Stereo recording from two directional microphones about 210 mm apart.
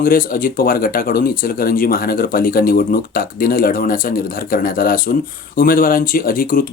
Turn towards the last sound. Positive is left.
turn(degrees=40)  # may be behind; listen again after turning